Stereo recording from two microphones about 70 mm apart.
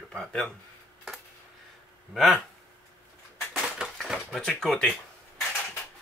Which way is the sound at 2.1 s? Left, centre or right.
Centre.